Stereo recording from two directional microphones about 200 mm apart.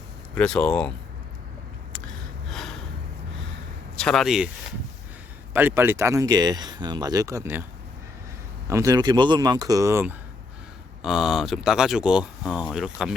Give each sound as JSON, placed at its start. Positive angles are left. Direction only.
{"t": 0.3, "sound": "speech", "side_deg": 5}
{"t": 2.5, "sound": "gasp", "side_deg": 0}
{"t": 3.9, "sound": "speech", "side_deg": 5}
{"t": 5.5, "sound": "speech", "side_deg": -10}
{"t": 8.6, "sound": "speech", "side_deg": -15}